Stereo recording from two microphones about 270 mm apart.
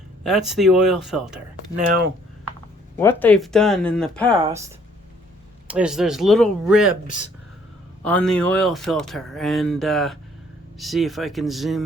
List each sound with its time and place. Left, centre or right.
0.3 s speech: centre
3.0 s speech: centre
4.3 s speech: centre
5.6 s speech: centre
8.0 s speech: centre